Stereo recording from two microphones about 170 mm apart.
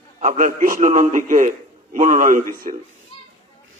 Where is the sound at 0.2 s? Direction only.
50° right (ahead or behind).